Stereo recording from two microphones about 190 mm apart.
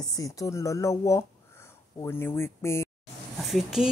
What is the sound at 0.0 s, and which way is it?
Speech, 20° left (ahead or behind).